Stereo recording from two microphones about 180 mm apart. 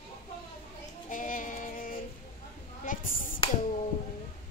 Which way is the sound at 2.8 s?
50° left (ahead or behind).